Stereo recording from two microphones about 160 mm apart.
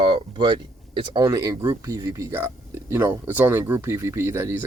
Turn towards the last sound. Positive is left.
turn(degrees=-15)  # may be behind; listen again after turning